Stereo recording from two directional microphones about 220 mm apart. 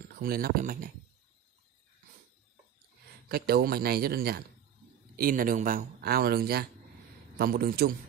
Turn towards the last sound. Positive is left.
turn(degrees=-45)  # may be behind; listen again after turning